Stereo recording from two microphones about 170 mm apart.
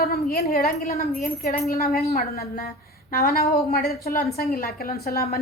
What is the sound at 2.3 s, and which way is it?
A woman's voice, 55° left (ahead or behind).